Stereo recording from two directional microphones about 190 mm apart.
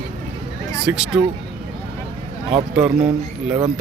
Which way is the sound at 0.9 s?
5° right (ahead or behind).